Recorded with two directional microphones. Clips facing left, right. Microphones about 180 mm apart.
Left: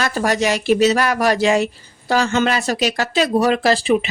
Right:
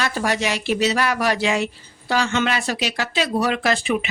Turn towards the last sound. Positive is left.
turn(degrees=35)  # may be behind; listen again after turning